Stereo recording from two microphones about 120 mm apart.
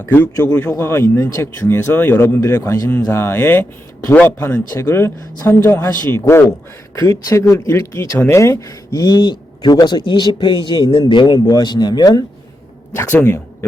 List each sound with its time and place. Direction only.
0.1 s speech: 20° left (ahead or behind); by 12.2 s 35° left (ahead or behind)
12.9 s speech: 20° left (ahead or behind)